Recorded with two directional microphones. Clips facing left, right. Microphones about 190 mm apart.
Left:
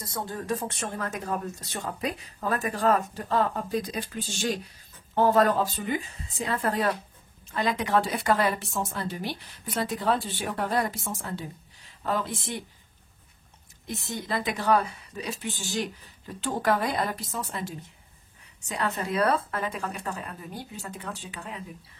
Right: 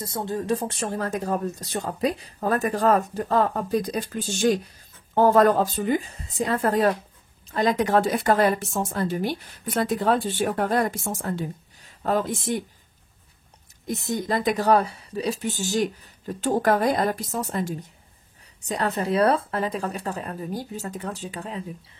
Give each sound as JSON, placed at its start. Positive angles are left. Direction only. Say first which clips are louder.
{"t": 0.0, "sound": "speech", "louder": "right 6 dB", "side_deg": -25}
{"t": 13.8, "sound": "speech", "louder": "right 7 dB", "side_deg": -45}